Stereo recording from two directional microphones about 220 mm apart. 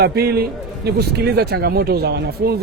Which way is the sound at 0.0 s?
45° right (ahead or behind).